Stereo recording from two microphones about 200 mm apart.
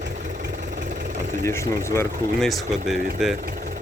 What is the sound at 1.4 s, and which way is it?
Speech, 15° left (ahead or behind).